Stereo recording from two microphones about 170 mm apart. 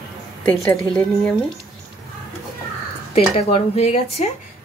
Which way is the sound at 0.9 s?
5° left (ahead or behind).